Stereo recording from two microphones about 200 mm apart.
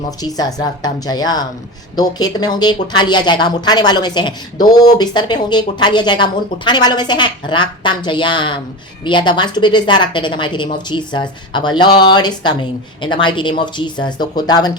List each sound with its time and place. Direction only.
0.2 s speech: 20° left (ahead or behind)